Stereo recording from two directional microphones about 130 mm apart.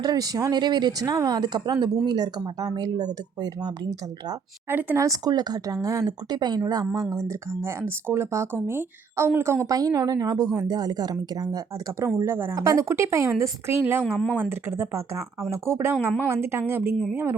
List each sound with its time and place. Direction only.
0.0 s speech: 30° right (ahead or behind)
4.7 s a woman's voice: 15° right (ahead or behind)
5.0 s a woman's voice: 30° right (ahead or behind)
14.0 s speech: 5° left (ahead or behind)
14.5 s speech: 20° right (ahead or behind)